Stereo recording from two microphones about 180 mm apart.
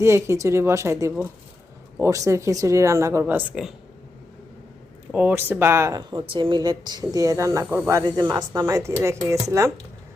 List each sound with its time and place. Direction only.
0.0 s speech: 15° right (ahead or behind)
5.1 s speech: 10° right (ahead or behind)